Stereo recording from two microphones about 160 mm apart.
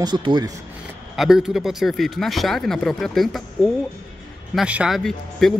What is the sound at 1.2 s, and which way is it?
Speech, centre (ahead or behind).